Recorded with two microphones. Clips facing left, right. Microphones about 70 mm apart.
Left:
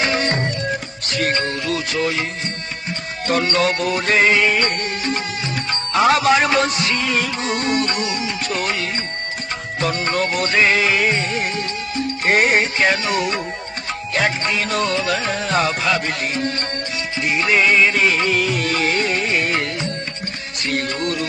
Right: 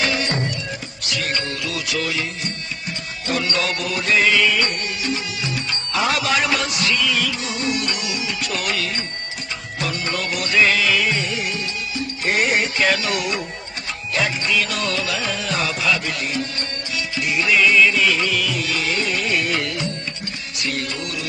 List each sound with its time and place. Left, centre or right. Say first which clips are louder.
0.0 s music: left 2 dB; left
14.1 s music: left 1 dB; left